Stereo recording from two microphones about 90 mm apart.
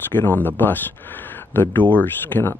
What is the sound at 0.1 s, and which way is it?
Speech, 20° left (ahead or behind).